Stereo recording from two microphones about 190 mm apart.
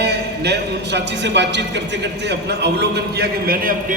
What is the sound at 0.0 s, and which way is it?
A man's voice, 60° right (ahead or behind).